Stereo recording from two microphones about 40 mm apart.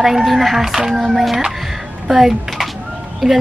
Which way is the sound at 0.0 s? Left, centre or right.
Centre.